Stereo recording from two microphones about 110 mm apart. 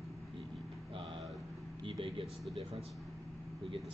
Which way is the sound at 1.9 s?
50° right (ahead or behind).